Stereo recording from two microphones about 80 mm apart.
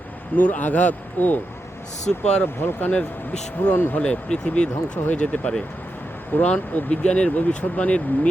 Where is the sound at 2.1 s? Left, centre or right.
Centre.